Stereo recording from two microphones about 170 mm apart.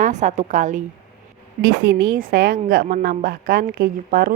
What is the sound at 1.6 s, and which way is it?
Speech, 65° right (ahead or behind).